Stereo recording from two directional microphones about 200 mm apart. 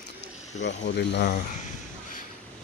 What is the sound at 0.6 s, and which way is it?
Speech, 60° left (ahead or behind).